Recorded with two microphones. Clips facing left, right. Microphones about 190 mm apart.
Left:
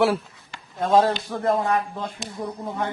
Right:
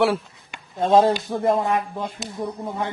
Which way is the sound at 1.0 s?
15° right (ahead or behind).